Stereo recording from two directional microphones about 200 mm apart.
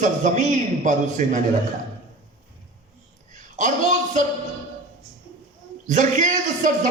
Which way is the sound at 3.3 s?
40° right (ahead or behind).